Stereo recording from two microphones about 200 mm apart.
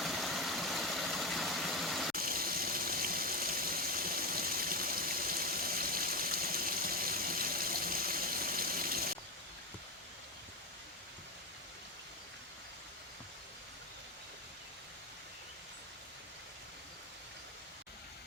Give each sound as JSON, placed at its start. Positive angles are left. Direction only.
{"t": 0.0, "sound": "vehicle", "side_deg": 0}
{"t": 2.1, "sound": "water", "side_deg": -45}